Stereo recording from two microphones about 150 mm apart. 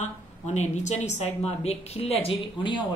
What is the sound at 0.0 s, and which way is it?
A woman's voice, 50° left (ahead or behind).